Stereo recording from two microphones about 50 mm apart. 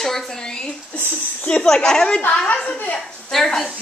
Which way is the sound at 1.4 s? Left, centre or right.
Centre.